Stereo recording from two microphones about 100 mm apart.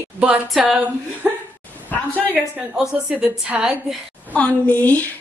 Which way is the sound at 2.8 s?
10° right (ahead or behind).